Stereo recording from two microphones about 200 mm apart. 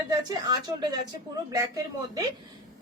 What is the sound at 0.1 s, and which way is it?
A woman's voice, 20° right (ahead or behind).